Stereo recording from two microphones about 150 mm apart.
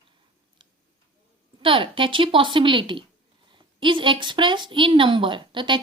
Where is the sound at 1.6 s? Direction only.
35° right (ahead or behind).